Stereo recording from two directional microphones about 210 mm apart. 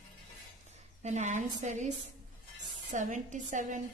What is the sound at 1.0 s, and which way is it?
A woman's voice, 35° right (ahead or behind).